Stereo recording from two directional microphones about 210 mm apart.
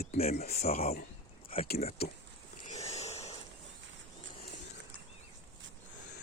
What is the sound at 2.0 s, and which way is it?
Speech, 50° left (ahead or behind).